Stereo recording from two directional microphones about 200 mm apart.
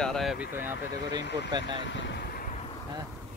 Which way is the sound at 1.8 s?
65° left (ahead or behind).